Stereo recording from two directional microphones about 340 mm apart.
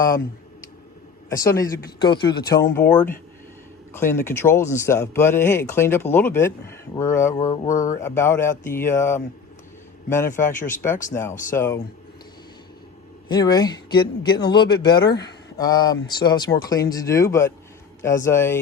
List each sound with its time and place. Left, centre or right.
1.3 s speech: centre
10.5 s speech: left
10.8 s speech: centre
13.2 s speech: centre